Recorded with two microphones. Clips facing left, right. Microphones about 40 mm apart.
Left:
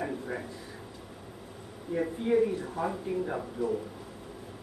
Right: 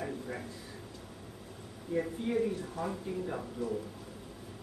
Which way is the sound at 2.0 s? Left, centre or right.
Centre.